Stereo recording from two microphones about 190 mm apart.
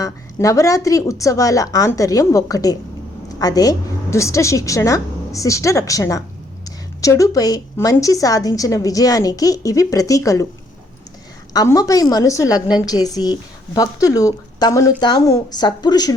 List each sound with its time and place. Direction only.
0.0 s a woman's voice: 15° left (ahead or behind)
11.5 s speech: 20° left (ahead or behind)